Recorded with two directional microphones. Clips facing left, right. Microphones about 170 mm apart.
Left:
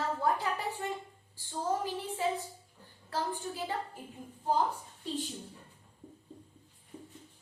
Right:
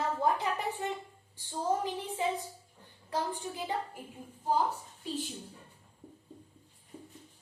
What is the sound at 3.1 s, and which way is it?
Speech, 15° right (ahead or behind).